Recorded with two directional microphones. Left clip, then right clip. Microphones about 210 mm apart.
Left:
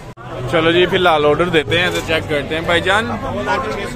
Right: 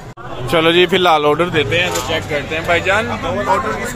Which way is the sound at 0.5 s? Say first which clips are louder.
Right 1 dB; 30° right (ahead or behind).